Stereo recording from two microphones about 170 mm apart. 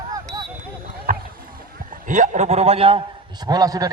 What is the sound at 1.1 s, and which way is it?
Rowboat, 55° right (ahead or behind).